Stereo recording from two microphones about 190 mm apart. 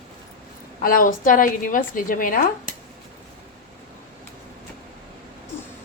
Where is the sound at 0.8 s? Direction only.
45° left (ahead or behind).